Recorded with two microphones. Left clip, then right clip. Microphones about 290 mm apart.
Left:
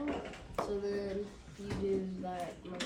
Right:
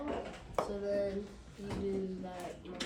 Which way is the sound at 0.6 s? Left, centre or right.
Centre.